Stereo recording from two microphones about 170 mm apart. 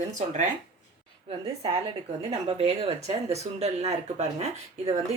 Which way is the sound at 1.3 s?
30° right (ahead or behind).